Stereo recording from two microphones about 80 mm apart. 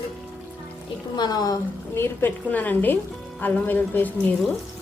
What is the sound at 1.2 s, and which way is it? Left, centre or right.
Speech, left.